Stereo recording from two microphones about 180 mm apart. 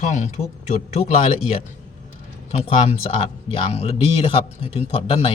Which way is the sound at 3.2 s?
30° left (ahead or behind).